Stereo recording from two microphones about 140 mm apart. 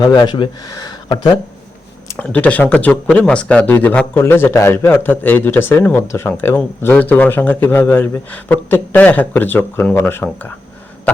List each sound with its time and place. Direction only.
0.0 s speech: 30° left (ahead or behind)
2.1 s speech: 10° left (ahead or behind)